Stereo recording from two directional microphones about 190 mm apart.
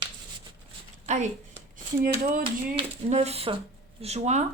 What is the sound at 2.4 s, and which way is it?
Speech, 30° right (ahead or behind).